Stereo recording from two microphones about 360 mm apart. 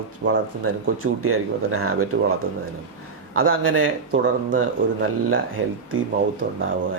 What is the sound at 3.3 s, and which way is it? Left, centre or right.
Speech, right.